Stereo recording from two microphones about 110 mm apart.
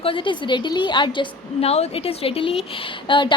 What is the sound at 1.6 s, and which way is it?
A woman's voice, 65° left (ahead or behind).